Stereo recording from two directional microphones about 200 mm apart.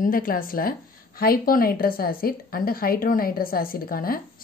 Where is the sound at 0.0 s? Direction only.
45° left (ahead or behind).